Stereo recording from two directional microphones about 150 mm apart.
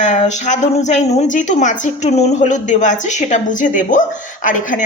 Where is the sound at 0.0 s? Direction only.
50° left (ahead or behind).